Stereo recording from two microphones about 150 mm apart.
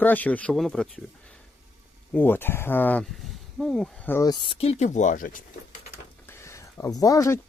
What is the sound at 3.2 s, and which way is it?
Speech, centre (ahead or behind).